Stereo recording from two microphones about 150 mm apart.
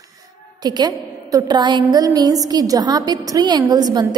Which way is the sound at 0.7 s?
25° right (ahead or behind).